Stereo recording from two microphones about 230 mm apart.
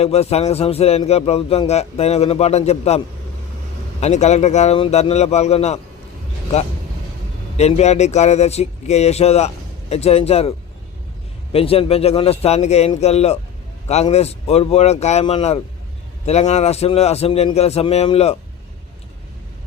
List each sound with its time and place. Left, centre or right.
0.0 s a man's voice: left
4.0 s a man's voice: left
7.5 s a man's voice: left
11.5 s a man's voice: left